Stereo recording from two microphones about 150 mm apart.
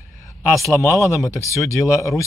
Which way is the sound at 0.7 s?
20° left (ahead or behind).